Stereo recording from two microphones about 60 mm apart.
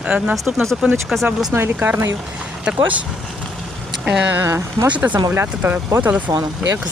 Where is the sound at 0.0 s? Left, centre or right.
Centre.